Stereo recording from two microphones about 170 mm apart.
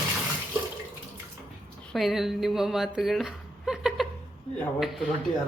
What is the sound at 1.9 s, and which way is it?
A man's voice, centre (ahead or behind).